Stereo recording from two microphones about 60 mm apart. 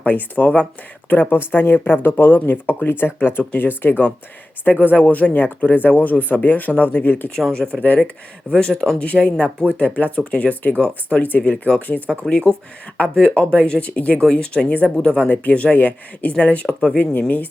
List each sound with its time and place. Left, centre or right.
0.0 s speech: left
8.5 s speech: centre